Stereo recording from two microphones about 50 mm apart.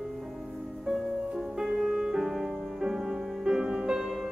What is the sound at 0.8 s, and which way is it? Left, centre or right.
Music, centre.